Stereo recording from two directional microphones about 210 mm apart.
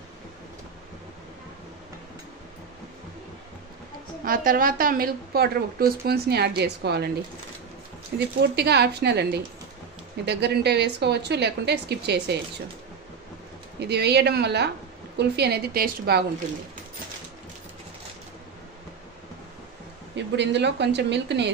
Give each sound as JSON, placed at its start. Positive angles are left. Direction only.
{"t": 4.2, "sound": "a woman's voice", "side_deg": -40}
{"t": 8.4, "sound": "a woman's voice", "side_deg": -50}
{"t": 13.7, "sound": "a woman's voice", "side_deg": -55}
{"t": 20.2, "sound": "speech", "side_deg": -55}